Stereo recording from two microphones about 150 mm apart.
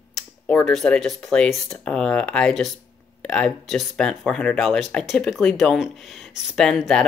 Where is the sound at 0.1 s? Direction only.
5° left (ahead or behind).